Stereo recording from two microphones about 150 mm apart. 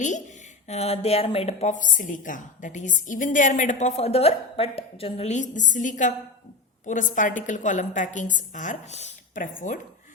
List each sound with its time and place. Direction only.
0.7 s a woman's voice: 45° left (ahead or behind); by 9.8 s 60° left (ahead or behind)